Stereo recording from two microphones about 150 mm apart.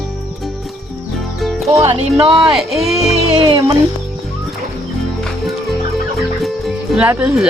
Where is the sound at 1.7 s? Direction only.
20° right (ahead or behind).